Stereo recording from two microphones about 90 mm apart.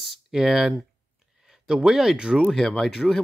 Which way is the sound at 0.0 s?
5° right (ahead or behind).